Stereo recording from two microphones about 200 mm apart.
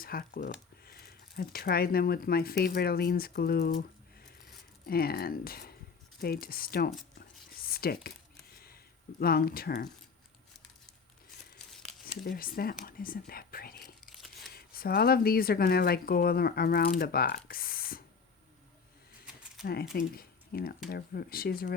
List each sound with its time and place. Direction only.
0.0 s speech: 45° left (ahead or behind)
4.9 s speech: 50° left (ahead or behind)
7.2 s whispering: 50° left (ahead or behind)
8.5 s squish: 50° left (ahead or behind)
11.7 s a sound: centre (ahead or behind)
12.1 s speech: 45° left (ahead or behind)
14.0 s crumpling: centre (ahead or behind)
14.5 s speech: 50° left (ahead or behind)
19.3 s typewriter: 5° right (ahead or behind)
19.6 s speech: 50° left (ahead or behind)